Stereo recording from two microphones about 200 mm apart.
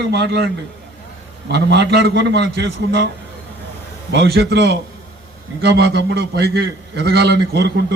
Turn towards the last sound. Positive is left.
turn(degrees=-55)  # may be behind; listen again after turning